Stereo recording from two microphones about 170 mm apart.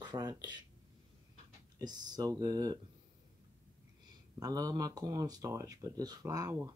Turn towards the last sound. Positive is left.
turn(degrees=-20)  # may be behind; listen again after turning